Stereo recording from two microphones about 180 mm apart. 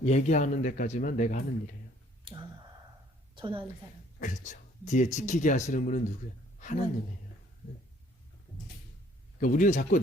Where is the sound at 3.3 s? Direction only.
30° right (ahead or behind).